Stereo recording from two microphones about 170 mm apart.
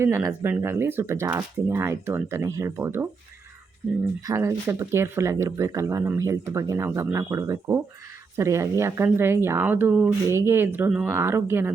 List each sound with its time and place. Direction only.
0.0 s speech: 15° right (ahead or behind)
4.2 s speech: 15° right (ahead or behind)